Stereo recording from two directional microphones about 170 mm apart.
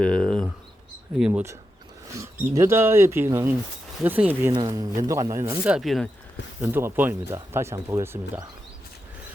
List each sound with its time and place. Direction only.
0.0 s a sound: 5° left (ahead or behind)
1.2 s speech: 10° right (ahead or behind)
4.5 s speech: 25° right (ahead or behind)
5.6 s speech: 5° right (ahead or behind)
6.6 s speech: 15° right (ahead or behind)